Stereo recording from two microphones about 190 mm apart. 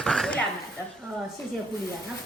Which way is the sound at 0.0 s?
5° left (ahead or behind).